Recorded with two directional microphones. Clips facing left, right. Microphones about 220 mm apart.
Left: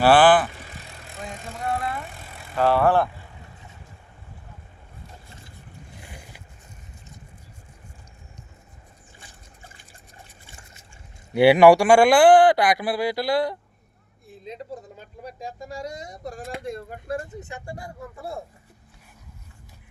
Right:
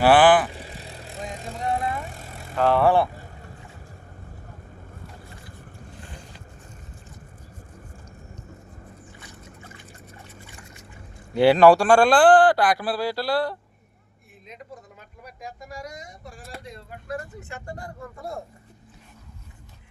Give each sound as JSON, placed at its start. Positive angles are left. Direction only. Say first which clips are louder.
{"t": 0.0, "sound": "speech", "louder": "even", "side_deg": -15}
{"t": 0.5, "sound": "vehicle", "louder": "right 4 dB", "side_deg": -35}
{"t": 1.5, "sound": "vehicle", "louder": "right 1 dB", "side_deg": -20}
{"t": 2.0, "sound": "vehicle", "louder": "right 2 dB", "side_deg": -40}
{"t": 2.6, "sound": "speech", "louder": "even", "side_deg": 5}
{"t": 2.8, "sound": "speech", "louder": "right 2 dB", "side_deg": -10}
{"t": 5.9, "sound": "boat", "louder": "right 1 dB", "side_deg": 10}
{"t": 9.1, "sound": "boat", "louder": "right 7 dB", "side_deg": 30}
{"t": 11.3, "sound": "speech", "louder": "left 1 dB", "side_deg": 10}
{"t": 14.4, "sound": "speech", "louder": "left 7 dB", "side_deg": 30}
{"t": 16.6, "sound": "speech", "louder": "left 8 dB", "side_deg": 50}
{"t": 17.5, "sound": "speech", "louder": "even", "side_deg": 10}